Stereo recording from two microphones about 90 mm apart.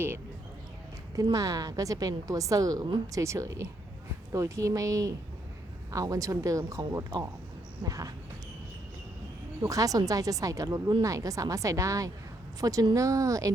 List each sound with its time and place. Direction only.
1.1 s a woman's voice: 40° right (ahead or behind)
9.6 s a woman's voice: 40° right (ahead or behind)